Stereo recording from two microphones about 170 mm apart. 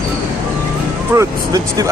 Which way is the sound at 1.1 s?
20° right (ahead or behind).